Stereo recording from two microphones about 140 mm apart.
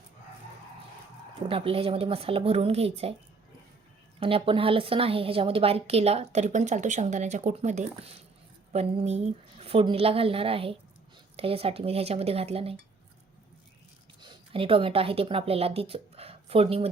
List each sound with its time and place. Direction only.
1.5 s a woman's voice: 40° right (ahead or behind)
4.2 s a woman's voice: 40° right (ahead or behind)
14.2 s a woman's voice: 35° right (ahead or behind)